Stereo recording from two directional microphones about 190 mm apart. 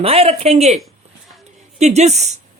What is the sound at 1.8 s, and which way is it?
Speech, 35° right (ahead or behind).